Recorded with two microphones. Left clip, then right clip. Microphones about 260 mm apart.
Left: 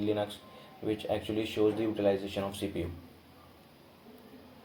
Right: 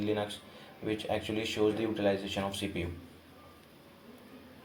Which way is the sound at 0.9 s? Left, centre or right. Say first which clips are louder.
Even; right.